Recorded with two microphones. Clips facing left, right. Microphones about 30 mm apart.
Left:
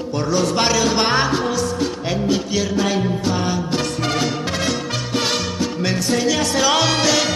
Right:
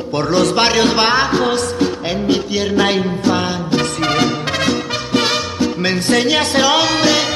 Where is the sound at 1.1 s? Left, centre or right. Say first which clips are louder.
Right 3 dB; centre.